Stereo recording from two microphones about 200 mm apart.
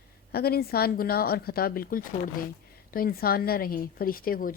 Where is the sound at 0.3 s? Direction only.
50° left (ahead or behind).